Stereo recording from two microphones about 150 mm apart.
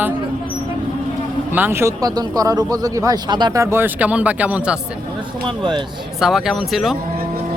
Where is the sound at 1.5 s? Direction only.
15° right (ahead or behind).